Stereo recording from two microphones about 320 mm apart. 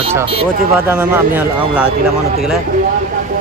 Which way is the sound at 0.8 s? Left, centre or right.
Centre.